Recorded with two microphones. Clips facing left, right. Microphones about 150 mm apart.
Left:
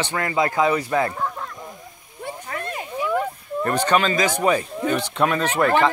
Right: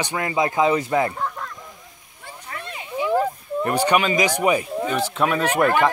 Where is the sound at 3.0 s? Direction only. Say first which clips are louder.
Right 3 dB; 30° right (ahead or behind).